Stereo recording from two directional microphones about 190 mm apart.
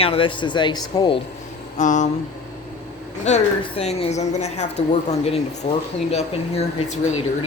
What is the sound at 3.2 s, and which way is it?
Speech, 35° left (ahead or behind).